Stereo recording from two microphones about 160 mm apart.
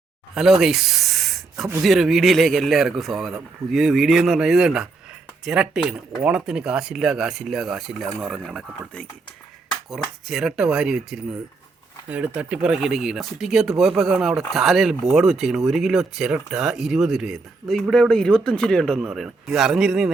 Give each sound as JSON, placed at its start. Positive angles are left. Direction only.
{"t": 0.3, "sound": "speech", "side_deg": 0}
{"t": 9.9, "sound": "speech", "side_deg": 0}